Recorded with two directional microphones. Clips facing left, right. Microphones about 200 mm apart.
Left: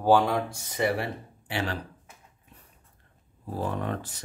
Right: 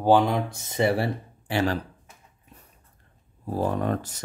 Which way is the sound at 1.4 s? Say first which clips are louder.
Right 6 dB; 40° right (ahead or behind).